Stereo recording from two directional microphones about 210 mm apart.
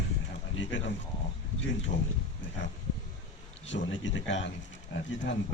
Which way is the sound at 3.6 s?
60° left (ahead or behind).